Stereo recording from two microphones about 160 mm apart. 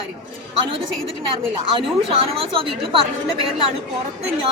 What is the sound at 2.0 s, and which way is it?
A woman's voice, 35° right (ahead or behind).